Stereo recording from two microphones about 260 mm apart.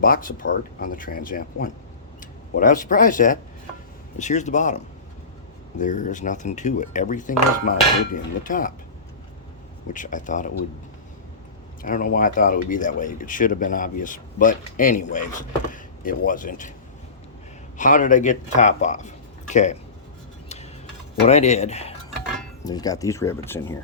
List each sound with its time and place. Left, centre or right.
0.0 s speech: left
5.8 s speech: left
9.9 s speech: left
11.8 s speech: left
17.7 s speech: left
21.2 s speech: left